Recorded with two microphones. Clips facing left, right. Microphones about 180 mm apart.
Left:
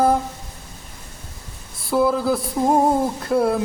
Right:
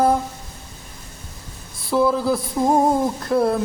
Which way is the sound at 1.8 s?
Centre (ahead or behind).